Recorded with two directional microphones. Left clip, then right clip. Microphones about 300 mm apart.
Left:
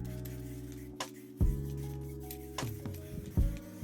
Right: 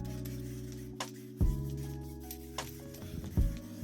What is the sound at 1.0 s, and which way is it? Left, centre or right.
Music, centre.